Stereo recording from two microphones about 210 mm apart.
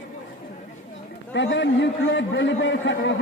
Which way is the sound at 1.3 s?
60° left (ahead or behind).